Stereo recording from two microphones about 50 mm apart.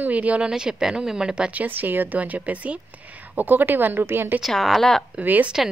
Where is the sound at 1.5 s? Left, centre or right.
Right.